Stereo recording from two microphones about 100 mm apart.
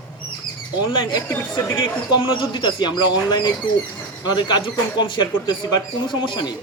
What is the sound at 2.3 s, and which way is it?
A man's voice, 55° left (ahead or behind).